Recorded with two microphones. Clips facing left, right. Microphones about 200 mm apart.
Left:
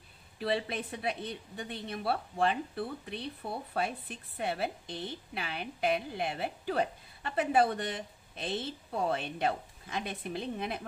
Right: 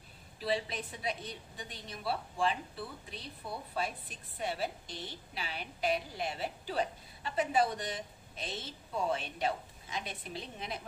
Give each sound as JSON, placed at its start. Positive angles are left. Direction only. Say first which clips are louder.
{"t": 0.4, "sound": "a woman's voice", "louder": "left 2 dB", "side_deg": 60}